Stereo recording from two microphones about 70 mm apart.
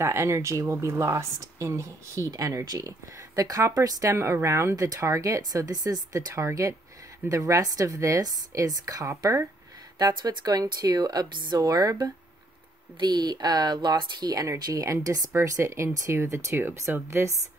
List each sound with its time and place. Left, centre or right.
0.0 s speech: right
2.3 s speech: right
9.9 s speech: right
13.0 s speech: right
14.5 s speech: right